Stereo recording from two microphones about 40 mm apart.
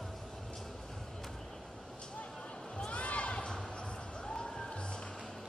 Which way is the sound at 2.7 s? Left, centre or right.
Left.